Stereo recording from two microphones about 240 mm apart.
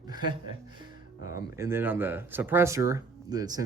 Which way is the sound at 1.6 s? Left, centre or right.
Centre.